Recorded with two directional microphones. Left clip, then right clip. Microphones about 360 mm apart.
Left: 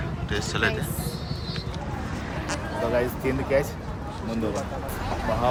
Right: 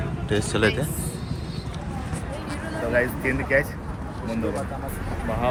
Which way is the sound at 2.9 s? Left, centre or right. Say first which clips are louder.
Right 5 dB; centre.